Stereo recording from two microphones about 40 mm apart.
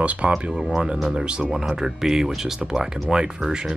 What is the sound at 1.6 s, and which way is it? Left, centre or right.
Speech, centre.